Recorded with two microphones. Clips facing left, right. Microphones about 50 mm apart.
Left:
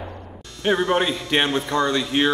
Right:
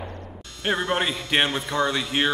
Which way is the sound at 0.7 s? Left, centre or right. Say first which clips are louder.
Left 4 dB; centre.